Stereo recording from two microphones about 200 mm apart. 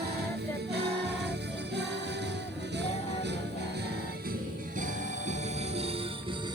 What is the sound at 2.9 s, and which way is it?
Music, 30° left (ahead or behind).